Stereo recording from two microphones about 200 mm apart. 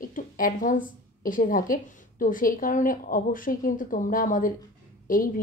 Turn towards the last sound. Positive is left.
turn(degrees=45)  # may be behind; listen again after turning